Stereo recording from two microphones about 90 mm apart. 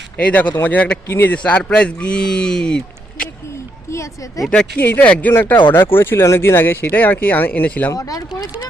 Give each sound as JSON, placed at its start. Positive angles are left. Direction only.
{"t": 0.2, "sound": "speech", "side_deg": 15}
{"t": 3.5, "sound": "a sound", "side_deg": 30}
{"t": 4.8, "sound": "speech", "side_deg": 20}
{"t": 7.9, "sound": "speech", "side_deg": 40}